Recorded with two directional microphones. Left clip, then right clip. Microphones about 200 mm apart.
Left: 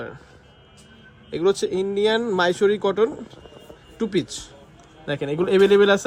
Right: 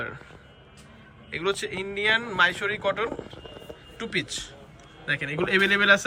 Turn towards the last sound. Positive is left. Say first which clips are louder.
# left 4 dB
turn(degrees=20)  # may be behind; listen again after turning